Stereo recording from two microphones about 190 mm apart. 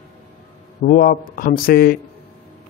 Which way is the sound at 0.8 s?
50° left (ahead or behind).